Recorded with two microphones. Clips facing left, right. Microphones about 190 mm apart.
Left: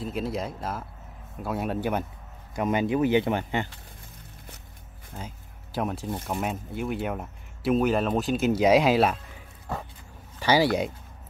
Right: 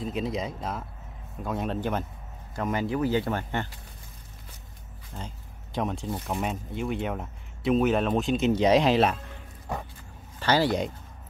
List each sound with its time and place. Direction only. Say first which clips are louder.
0.0 s speech: even; 5° left (ahead or behind)
5.1 s a sound: even; 5° left (ahead or behind)
6.2 s speech: even; centre (ahead or behind)
9.7 s dog: even; 15° right (ahead or behind)
10.4 s speech: left 2 dB; 10° left (ahead or behind)